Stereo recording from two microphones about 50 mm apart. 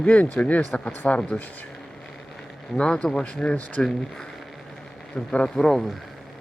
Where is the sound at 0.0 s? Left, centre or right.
Left.